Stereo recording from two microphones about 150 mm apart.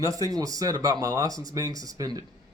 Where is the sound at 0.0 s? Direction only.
25° right (ahead or behind).